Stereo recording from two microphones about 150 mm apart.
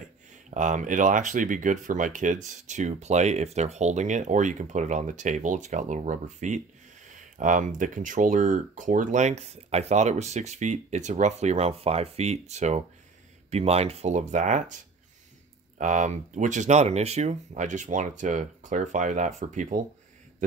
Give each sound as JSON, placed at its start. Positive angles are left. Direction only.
{"t": 0.6, "sound": "speech", "side_deg": -55}
{"t": 15.8, "sound": "speech", "side_deg": -55}